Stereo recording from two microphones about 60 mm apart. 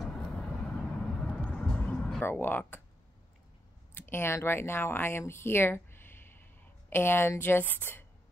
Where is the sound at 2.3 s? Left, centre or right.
Left.